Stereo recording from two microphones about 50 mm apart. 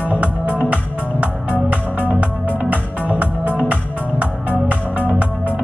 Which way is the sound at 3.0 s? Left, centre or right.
Right.